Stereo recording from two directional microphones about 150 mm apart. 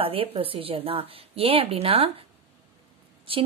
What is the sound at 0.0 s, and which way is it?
Speech, 40° right (ahead or behind).